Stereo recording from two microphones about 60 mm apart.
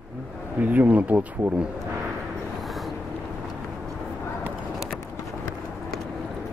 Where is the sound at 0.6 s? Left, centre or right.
Right.